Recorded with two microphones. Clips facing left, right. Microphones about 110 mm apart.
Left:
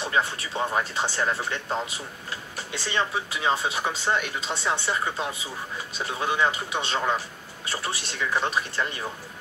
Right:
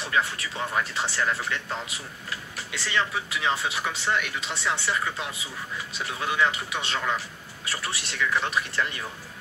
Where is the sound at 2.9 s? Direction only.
25° left (ahead or behind).